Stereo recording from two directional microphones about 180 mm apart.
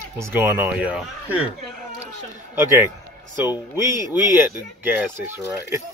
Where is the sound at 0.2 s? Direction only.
15° right (ahead or behind).